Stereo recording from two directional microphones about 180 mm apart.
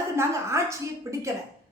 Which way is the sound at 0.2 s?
15° right (ahead or behind).